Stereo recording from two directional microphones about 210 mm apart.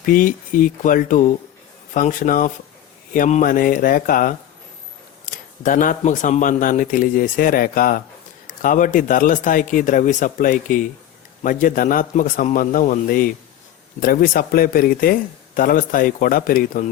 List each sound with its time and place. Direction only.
0.0 s speech: 40° left (ahead or behind)